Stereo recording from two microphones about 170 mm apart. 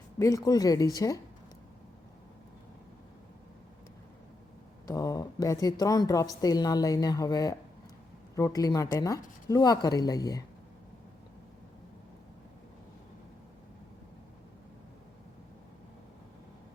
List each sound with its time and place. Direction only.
0.2 s a woman's voice: 20° left (ahead or behind)
4.9 s a woman's voice: 20° left (ahead or behind)